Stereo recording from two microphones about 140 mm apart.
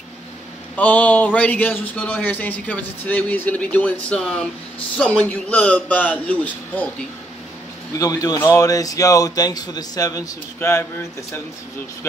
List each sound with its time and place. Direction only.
0.7 s speech: 10° left (ahead or behind)
7.9 s a man's voice: 25° left (ahead or behind)